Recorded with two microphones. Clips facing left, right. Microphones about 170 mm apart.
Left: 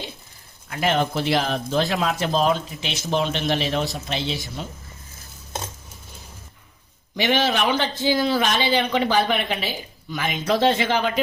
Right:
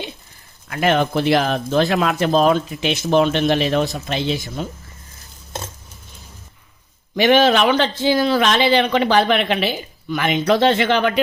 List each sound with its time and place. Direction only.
0.7 s speech: 65° right (ahead or behind)
7.3 s speech: 85° right; by 11.2 s 70° right (ahead or behind)